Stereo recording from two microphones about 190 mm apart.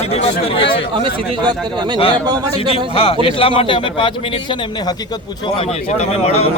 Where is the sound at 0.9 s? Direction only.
25° right (ahead or behind).